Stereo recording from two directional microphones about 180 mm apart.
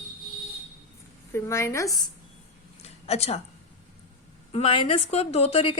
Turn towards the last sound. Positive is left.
turn(degrees=30)  # may be behind; listen again after turning